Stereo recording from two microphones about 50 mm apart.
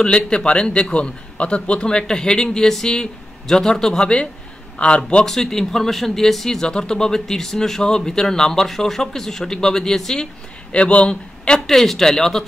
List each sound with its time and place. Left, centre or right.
0.0 s a man's voice: centre
5.2 s speech: centre
10.7 s speech: left